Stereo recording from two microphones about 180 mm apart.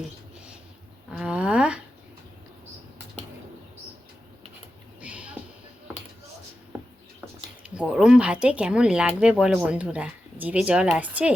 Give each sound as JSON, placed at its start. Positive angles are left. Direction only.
{"t": 1.1, "sound": "speech", "side_deg": -5}
{"t": 4.9, "sound": "music", "side_deg": -5}
{"t": 7.6, "sound": "speech", "side_deg": -5}